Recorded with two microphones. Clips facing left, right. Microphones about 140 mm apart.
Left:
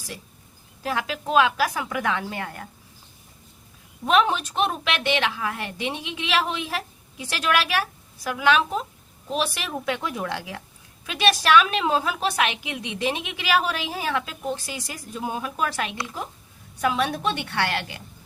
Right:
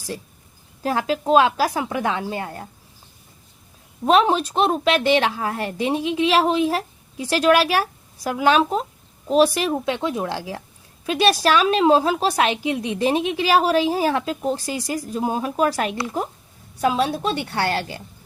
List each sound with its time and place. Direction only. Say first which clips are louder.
0.8 s a woman's voice: right 6 dB; 35° right (ahead or behind)
4.0 s a woman's voice: right 4 dB; 35° right (ahead or behind)
16.8 s a woman's voice: right 3 dB; 30° right (ahead or behind)